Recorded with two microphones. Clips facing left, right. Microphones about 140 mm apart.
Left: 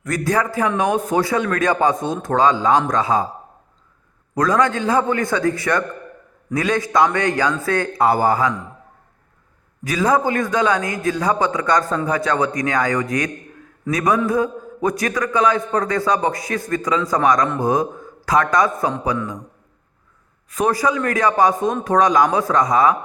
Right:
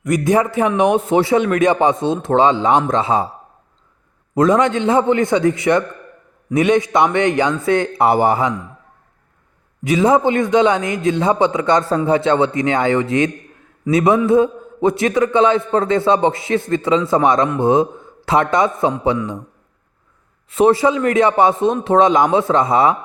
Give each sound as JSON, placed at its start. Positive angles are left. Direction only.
{"t": 0.0, "sound": "a man's voice", "side_deg": -20}
{"t": 4.4, "sound": "a man's voice", "side_deg": -25}
{"t": 9.8, "sound": "a man's voice", "side_deg": -25}
{"t": 20.5, "sound": "a man's voice", "side_deg": -25}